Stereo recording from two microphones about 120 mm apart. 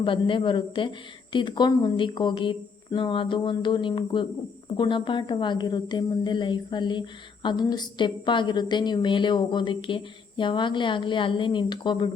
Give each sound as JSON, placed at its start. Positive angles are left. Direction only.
{"t": 0.0, "sound": "a woman's voice", "side_deg": 45}